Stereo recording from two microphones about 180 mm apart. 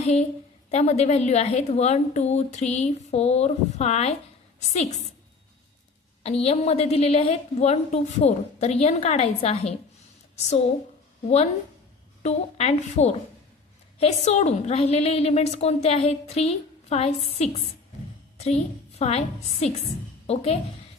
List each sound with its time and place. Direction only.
0.0 s a woman's voice: 35° left (ahead or behind)
6.2 s a woman's voice: 35° left (ahead or behind)
12.2 s a woman's voice: 35° left (ahead or behind)